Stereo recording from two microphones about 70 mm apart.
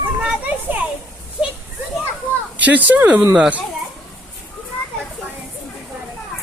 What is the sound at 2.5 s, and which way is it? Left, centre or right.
Speech, right.